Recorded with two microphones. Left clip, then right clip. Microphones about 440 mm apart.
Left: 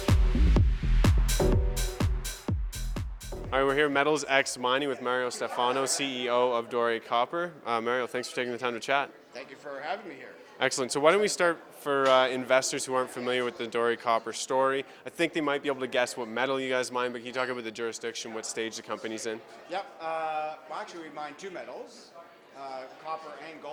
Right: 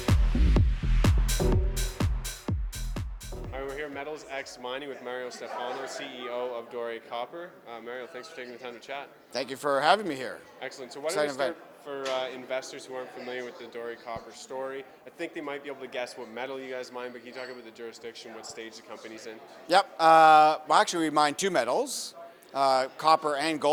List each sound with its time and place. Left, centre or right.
0.0 s music: centre
3.8 s speech: left
9.3 s speech: right
10.6 s speech: left
11.9 s speech: left
19.6 s a man's voice: right